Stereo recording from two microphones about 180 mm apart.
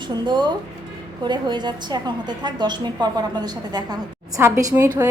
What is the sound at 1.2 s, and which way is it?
A woman's voice, 25° right (ahead or behind).